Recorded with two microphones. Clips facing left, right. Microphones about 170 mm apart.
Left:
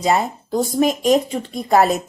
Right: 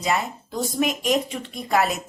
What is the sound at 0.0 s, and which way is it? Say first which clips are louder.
Speech: left 6 dB; 35° left (ahead or behind).